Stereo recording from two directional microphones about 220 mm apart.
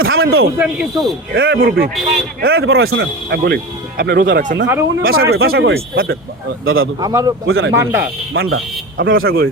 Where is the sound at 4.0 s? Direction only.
40° right (ahead or behind).